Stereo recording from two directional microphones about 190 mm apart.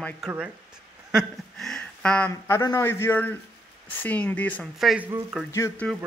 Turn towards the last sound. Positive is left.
turn(degrees=15)  # may be behind; listen again after turning